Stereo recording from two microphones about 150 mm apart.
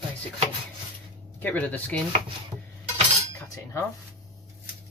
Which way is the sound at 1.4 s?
10° left (ahead or behind).